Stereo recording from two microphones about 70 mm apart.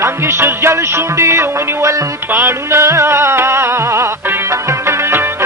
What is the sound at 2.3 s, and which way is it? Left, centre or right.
Music, right.